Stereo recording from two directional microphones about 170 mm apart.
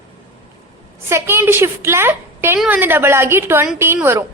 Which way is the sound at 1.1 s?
15° right (ahead or behind).